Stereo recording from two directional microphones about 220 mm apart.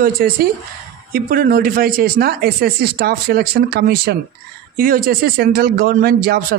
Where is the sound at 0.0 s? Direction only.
45° right (ahead or behind).